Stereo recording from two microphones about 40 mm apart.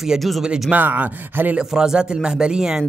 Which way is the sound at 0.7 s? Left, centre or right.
Right.